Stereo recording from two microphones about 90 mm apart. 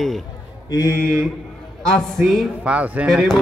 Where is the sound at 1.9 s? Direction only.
5° left (ahead or behind).